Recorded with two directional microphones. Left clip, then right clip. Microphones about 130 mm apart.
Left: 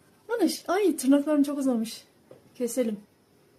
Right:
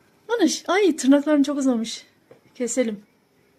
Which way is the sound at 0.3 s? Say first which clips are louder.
Right 5 dB; 35° right (ahead or behind).